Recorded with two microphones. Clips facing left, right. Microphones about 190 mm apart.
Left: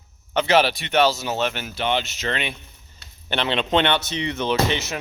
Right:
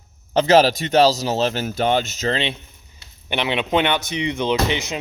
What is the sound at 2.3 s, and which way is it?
Speech, 30° right (ahead or behind).